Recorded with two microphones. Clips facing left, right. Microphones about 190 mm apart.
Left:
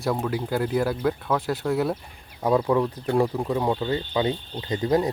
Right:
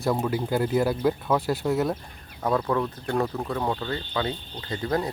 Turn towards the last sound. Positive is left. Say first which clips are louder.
# left 5 dB
turn(degrees=15)  # may be behind; listen again after turning